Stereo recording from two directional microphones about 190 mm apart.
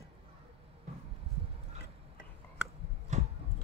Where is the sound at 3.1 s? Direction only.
35° right (ahead or behind).